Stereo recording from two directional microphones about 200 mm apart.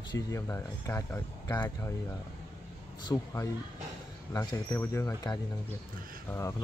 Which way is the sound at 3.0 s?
20° left (ahead or behind).